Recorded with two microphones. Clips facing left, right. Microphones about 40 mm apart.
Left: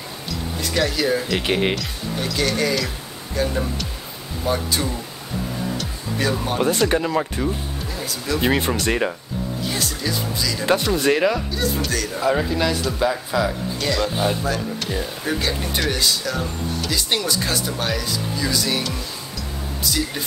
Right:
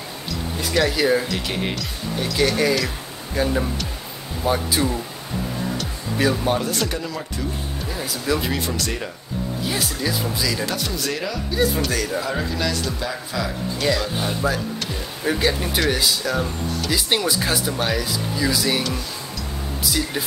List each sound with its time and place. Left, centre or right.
0.3 s music: centre
1.4 s speech: left
1.8 s speech: centre
5.7 s music: centre
6.9 s speech: left
7.9 s speech: centre
8.4 s speech: left
9.6 s speech: centre
10.6 s speech: left
11.5 s speech: centre
12.2 s speech: centre
13.7 s speech: centre
14.0 s speech: centre
14.4 s speech: centre